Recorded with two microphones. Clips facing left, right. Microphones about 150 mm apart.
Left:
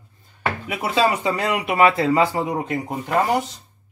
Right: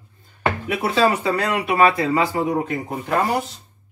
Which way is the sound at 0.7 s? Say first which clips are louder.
Right 1 dB; 15° left (ahead or behind).